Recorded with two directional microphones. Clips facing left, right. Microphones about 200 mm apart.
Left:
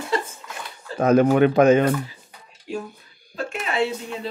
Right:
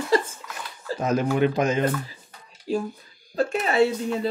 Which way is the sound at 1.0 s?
60° left (ahead or behind).